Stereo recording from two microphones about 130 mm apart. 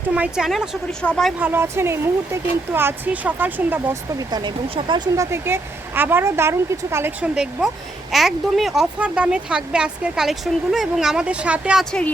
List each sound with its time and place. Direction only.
0.1 s speech: 5° right (ahead or behind)
1.4 s speech: 15° right (ahead or behind)
4.2 s a woman's voice: 30° right (ahead or behind)
8.1 s speech: centre (ahead or behind)
11.9 s speech: 5° left (ahead or behind)